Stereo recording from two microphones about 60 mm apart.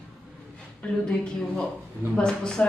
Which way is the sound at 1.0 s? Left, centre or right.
Centre.